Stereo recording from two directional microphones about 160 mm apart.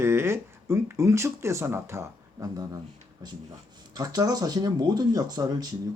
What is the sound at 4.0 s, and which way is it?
Speech, 25° right (ahead or behind).